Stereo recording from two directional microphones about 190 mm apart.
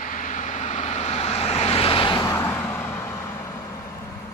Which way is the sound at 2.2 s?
15° left (ahead or behind).